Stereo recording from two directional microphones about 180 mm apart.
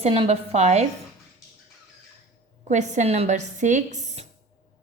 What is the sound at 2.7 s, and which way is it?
A woman's voice, 40° right (ahead or behind).